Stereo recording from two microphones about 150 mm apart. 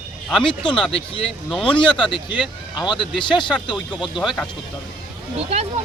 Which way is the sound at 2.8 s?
30° left (ahead or behind).